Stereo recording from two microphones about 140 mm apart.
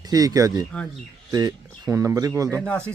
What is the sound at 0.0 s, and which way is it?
Speech, 25° right (ahead or behind).